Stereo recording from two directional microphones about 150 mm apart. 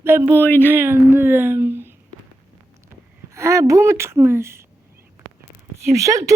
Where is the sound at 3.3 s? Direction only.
20° right (ahead or behind).